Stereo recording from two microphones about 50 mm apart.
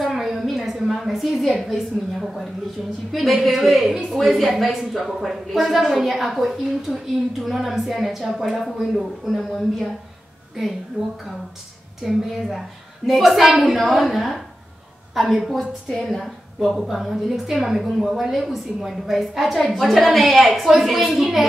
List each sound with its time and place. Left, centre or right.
0.0 s a sound: centre
1.0 s a woman's voice: centre
11.0 s speech: right
12.0 s a woman's voice: centre